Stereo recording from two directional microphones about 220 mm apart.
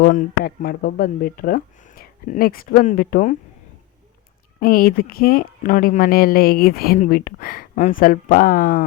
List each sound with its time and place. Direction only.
0.0 s speech: 40° left (ahead or behind)
4.6 s speech: 40° left (ahead or behind)